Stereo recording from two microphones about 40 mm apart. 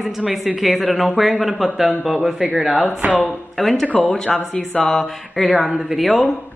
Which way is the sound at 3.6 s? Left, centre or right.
Centre.